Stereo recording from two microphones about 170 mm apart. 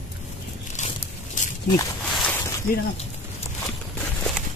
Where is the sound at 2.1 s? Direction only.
5° left (ahead or behind).